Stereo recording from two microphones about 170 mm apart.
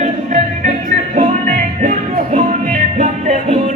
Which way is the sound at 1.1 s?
45° right (ahead or behind).